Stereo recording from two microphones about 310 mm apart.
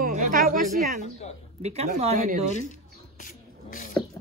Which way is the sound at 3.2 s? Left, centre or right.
Left.